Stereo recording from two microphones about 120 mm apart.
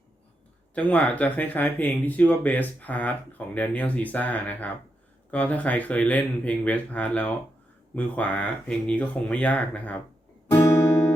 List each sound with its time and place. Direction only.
0.7 s speech: 10° left (ahead or behind)
10.5 s guitar: 20° left (ahead or behind)